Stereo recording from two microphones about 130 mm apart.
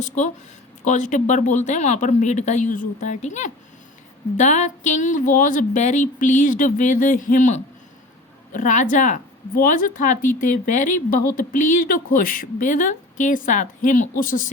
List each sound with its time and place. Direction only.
0.9 s a woman's voice: 70° left (ahead or behind); by 14.5 s 90° left